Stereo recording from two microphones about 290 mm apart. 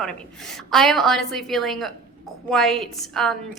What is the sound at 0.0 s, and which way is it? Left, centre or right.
A woman's voice, centre.